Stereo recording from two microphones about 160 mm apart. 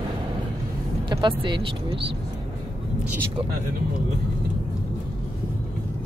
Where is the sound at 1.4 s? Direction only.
30° right (ahead or behind).